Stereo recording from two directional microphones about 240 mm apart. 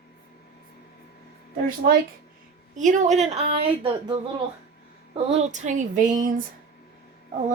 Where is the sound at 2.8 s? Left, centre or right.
Right.